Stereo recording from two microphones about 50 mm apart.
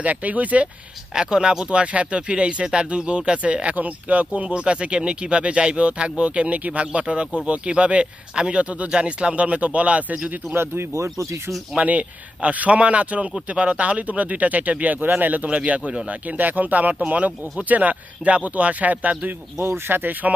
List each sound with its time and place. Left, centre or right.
0.0 s speech: right
1.1 s speech: centre
10.5 s speech: right
11.7 s speech: right
19.6 s speech: right